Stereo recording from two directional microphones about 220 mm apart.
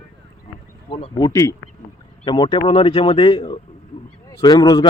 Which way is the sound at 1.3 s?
15° left (ahead or behind).